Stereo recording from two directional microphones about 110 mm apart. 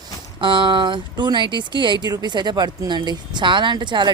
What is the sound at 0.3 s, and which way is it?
A woman's voice, 50° right (ahead or behind).